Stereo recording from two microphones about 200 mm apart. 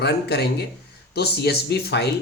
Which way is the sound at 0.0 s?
55° left (ahead or behind).